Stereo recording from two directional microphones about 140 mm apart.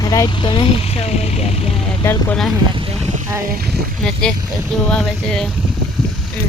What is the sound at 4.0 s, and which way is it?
Speech, 5° left (ahead or behind).